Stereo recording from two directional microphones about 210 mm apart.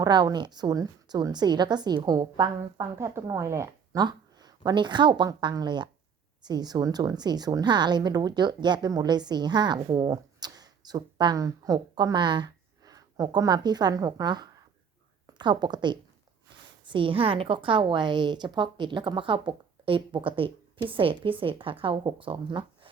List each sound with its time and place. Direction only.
0.0 s a woman's voice: 20° right (ahead or behind)